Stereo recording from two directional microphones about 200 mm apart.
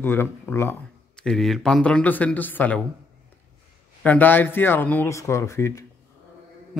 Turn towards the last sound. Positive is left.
turn(degrees=15)  # may be behind; listen again after turning